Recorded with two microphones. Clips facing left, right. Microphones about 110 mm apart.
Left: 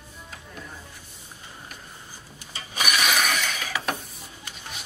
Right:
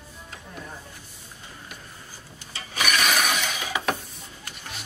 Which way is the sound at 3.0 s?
Centre (ahead or behind).